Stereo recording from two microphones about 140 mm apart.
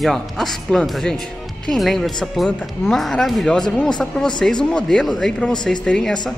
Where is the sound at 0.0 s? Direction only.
5° left (ahead or behind).